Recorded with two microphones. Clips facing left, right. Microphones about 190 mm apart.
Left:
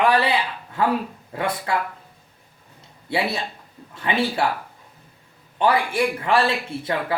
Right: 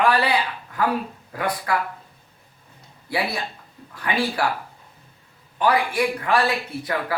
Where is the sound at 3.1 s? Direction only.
25° left (ahead or behind).